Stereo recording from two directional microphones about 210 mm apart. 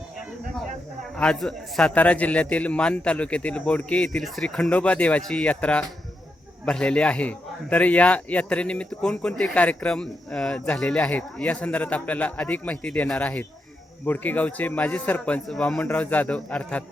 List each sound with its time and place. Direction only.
1.1 s a man's voice: 5° left (ahead or behind)